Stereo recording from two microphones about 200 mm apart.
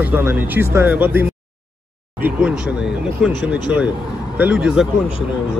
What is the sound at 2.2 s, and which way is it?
Speech, 5° right (ahead or behind).